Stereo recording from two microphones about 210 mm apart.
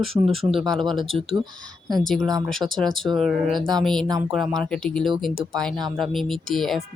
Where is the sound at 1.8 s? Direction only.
Centre (ahead or behind).